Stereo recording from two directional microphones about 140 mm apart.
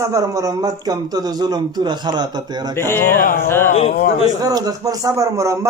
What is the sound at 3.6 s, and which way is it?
Speech, 50° left (ahead or behind).